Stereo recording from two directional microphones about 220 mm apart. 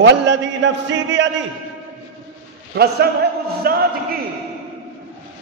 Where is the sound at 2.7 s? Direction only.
45° right (ahead or behind).